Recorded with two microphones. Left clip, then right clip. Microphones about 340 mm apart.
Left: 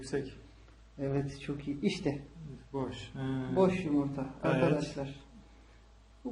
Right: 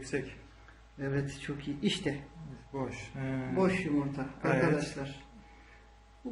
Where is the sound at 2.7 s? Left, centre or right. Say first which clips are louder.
Even; centre.